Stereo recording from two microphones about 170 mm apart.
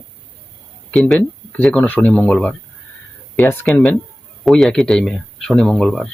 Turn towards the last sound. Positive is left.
turn(degrees=0)  # may be behind; listen again after turning